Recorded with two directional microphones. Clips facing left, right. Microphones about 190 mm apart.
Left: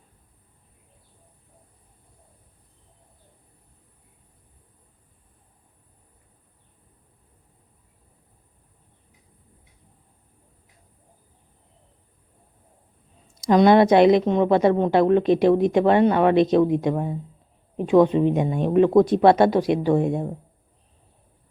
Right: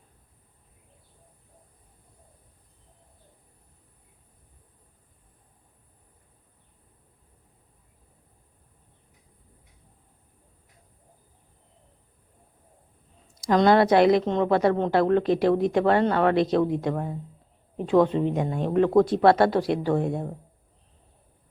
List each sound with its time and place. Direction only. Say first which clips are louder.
13.4 s a woman's voice: left 4 dB; 15° left (ahead or behind)